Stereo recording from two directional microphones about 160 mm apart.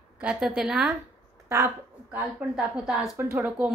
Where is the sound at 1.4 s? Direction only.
15° right (ahead or behind).